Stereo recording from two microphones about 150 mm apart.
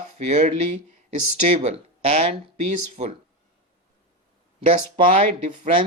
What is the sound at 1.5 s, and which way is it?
Speech, 45° right (ahead or behind).